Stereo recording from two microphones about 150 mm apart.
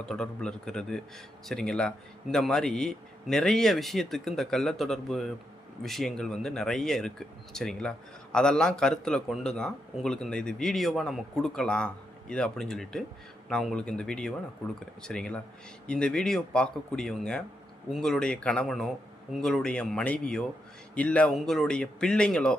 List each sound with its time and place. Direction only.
0.0 s speech: 5° left (ahead or behind)